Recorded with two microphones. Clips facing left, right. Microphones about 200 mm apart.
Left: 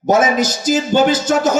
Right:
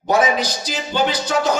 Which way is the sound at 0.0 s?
45° left (ahead or behind).